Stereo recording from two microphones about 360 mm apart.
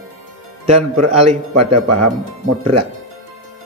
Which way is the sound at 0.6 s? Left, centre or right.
Centre.